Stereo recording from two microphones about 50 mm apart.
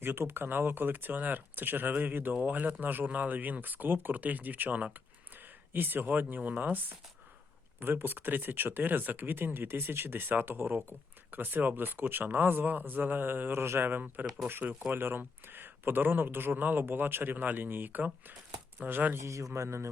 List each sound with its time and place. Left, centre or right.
0.0 s speech: right
7.8 s speech: right
13.6 s speech: right
14.4 s speech: right
19.2 s a man's voice: right
19.5 s speech: right